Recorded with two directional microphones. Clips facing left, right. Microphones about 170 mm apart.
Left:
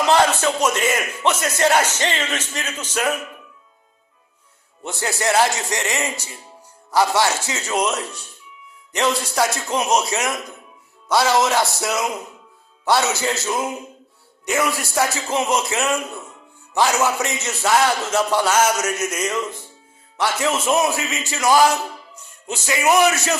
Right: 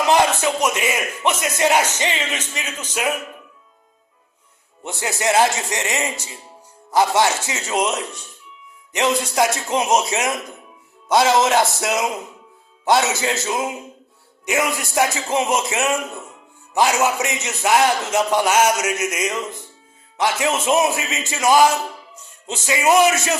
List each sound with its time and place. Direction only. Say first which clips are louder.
0.0 s a man's voice: even; 15° right (ahead or behind)
4.8 s a man's voice: even; 20° right (ahead or behind)